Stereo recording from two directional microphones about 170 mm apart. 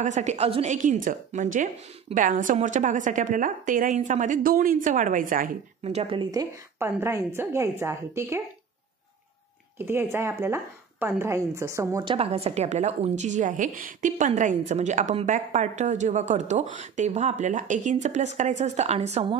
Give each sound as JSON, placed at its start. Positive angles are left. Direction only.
{"t": 0.0, "sound": "a woman's voice", "side_deg": -45}
{"t": 5.9, "sound": "a woman's voice", "side_deg": -35}
{"t": 6.8, "sound": "speech", "side_deg": -15}
{"t": 9.8, "sound": "speech", "side_deg": -15}
{"t": 12.0, "sound": "a woman's voice", "side_deg": -30}